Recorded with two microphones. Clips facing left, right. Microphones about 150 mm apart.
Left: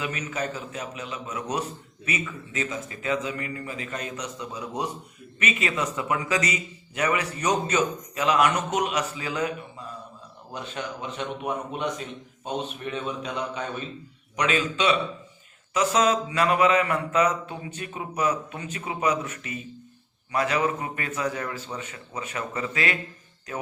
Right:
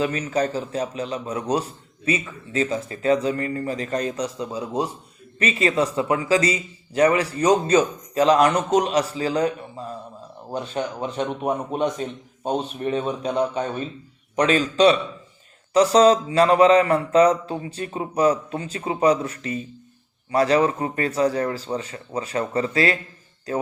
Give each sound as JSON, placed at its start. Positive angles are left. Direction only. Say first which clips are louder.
{"t": 0.0, "sound": "a man's voice", "louder": "right 8 dB", "side_deg": -35}